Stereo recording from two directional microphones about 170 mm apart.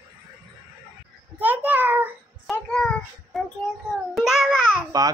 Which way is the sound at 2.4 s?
5° left (ahead or behind).